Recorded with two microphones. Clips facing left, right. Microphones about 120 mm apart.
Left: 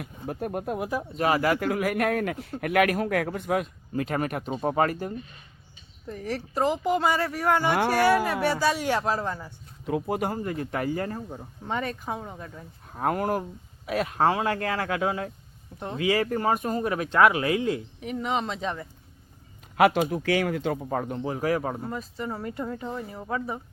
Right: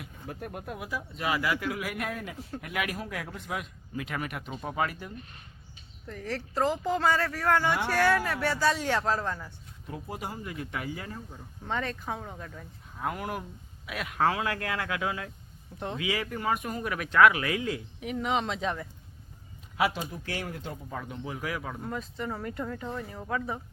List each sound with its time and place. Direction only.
0.3 s a man's voice: 45° left (ahead or behind)
6.1 s speech: 15° left (ahead or behind)
9.8 s a man's voice: 75° left (ahead or behind); by 11.4 s 40° left (ahead or behind)
11.6 s speech: 10° left (ahead or behind)
12.9 s a man's voice: 50° left (ahead or behind); by 17.8 s 30° left (ahead or behind)
18.0 s speech: centre (ahead or behind)
19.7 s speech: 60° left (ahead or behind); by 20.7 s 90° left
20.9 s speech: 45° left (ahead or behind)
21.8 s speech: 5° left (ahead or behind)